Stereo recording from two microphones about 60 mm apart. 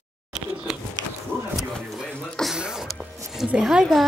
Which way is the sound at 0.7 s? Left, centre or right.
Centre.